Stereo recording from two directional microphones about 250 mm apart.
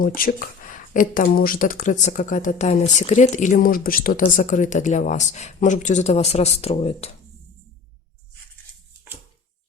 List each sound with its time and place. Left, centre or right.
0.0 s speech: left